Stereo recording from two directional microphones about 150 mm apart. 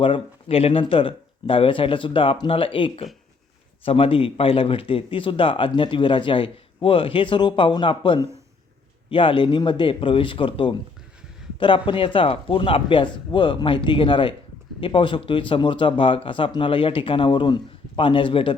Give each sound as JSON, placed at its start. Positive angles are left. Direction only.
{"t": 0.0, "sound": "speech", "side_deg": 40}